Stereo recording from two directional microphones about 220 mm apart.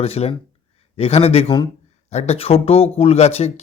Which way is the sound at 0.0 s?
25° left (ahead or behind).